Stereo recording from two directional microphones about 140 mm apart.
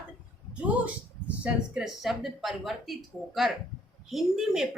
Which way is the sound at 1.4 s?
5° right (ahead or behind).